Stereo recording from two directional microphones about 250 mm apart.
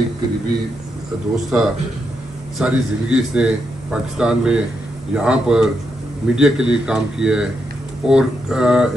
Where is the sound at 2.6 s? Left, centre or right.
Centre.